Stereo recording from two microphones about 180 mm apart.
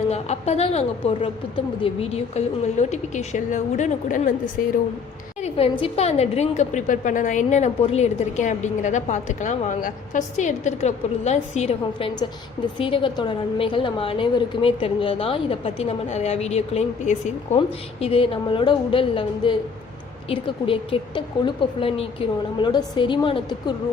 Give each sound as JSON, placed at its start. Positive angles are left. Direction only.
{"t": 0.1, "sound": "a woman's voice", "side_deg": 35}
{"t": 5.4, "sound": "a woman's voice", "side_deg": 35}